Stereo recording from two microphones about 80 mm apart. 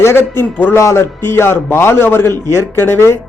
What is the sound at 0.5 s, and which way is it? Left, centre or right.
Speech, left.